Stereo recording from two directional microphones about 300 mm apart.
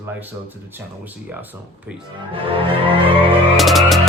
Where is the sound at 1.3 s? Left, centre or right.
Centre.